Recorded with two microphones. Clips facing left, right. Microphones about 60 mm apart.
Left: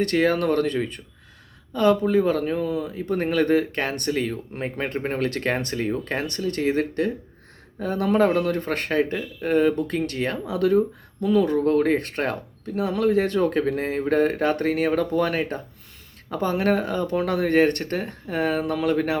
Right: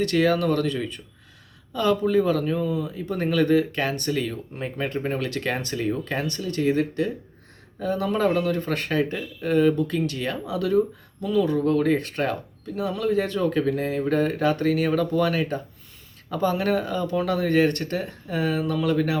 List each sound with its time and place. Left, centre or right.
0.0 s speech: left
2.6 s speech: left
2.9 s speech: left
6.1 s speech: left